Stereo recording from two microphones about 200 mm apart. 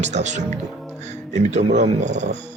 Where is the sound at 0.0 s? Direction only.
35° right (ahead or behind).